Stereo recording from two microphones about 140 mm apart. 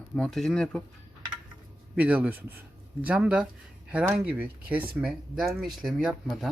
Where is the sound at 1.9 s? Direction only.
10° right (ahead or behind).